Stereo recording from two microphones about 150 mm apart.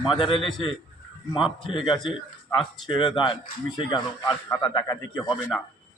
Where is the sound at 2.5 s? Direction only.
35° left (ahead or behind).